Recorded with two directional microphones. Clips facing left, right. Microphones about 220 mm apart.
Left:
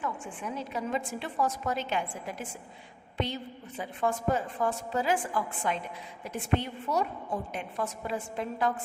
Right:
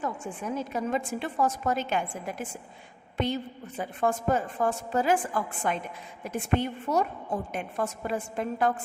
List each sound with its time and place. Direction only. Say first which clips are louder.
0.0 s a woman's voice: right 3 dB; 45° right (ahead or behind)
3.8 s a woman's voice: right 3 dB; 50° right (ahead or behind)